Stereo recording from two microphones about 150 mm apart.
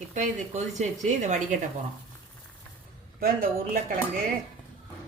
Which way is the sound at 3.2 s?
70° right (ahead or behind).